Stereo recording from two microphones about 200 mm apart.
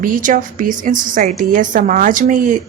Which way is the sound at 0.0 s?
40° right (ahead or behind).